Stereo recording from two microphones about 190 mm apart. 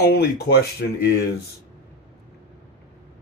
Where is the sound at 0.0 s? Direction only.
60° left (ahead or behind).